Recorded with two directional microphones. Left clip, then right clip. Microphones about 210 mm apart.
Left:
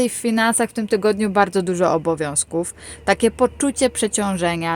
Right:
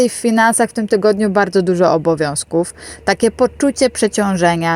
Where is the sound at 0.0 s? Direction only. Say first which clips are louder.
Right 6 dB; 20° right (ahead or behind).